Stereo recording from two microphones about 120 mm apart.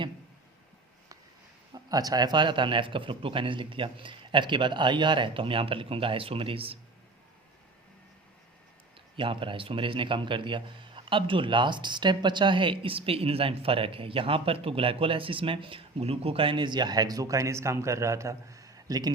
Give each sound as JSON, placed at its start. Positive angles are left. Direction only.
{"t": 1.7, "sound": "a man's voice", "side_deg": -35}
{"t": 9.1, "sound": "a man's voice", "side_deg": -45}